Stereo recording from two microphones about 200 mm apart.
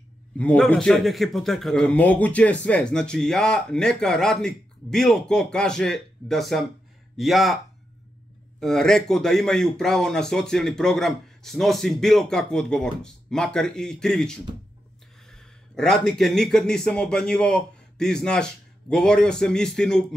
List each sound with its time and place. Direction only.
0.4 s a man's voice: 5° left (ahead or behind)
8.5 s a man's voice: centre (ahead or behind)